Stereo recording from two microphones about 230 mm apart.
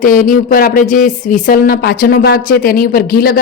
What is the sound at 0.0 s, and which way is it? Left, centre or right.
Speech, left.